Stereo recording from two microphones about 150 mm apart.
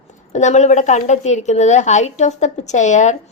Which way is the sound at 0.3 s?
50° left (ahead or behind).